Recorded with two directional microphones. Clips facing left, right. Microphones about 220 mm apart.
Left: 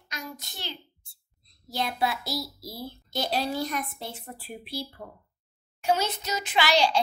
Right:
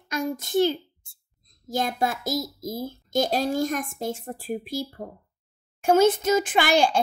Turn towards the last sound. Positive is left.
turn(degrees=-50)  # may be behind; listen again after turning